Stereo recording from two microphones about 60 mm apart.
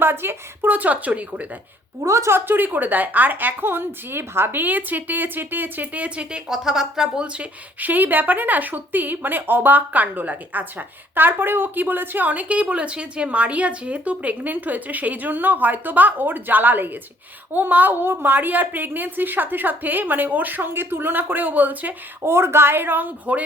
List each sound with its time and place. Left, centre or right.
0.0 s a woman's voice: right
2.0 s a woman's voice: right
2.3 s speech: right; by 7.4 s centre
7.8 s speech: right
22.2 s speech: right